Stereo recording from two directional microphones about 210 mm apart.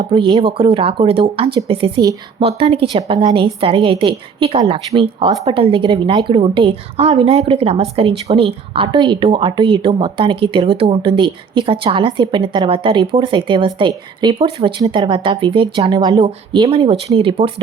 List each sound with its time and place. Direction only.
0.0 s a woman's voice: 25° right (ahead or behind)